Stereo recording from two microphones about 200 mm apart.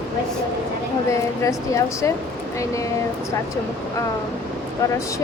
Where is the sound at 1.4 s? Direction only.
15° left (ahead or behind).